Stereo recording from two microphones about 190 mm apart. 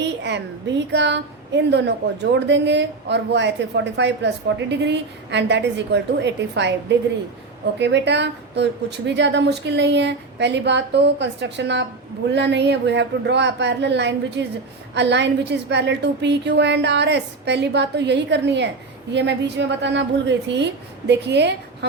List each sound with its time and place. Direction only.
0.0 s a woman's voice: 65° right (ahead or behind)